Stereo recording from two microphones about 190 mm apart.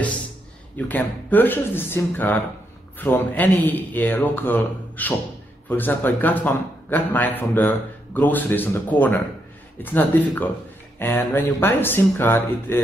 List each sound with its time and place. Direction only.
0.7 s a man's voice: 10° left (ahead or behind)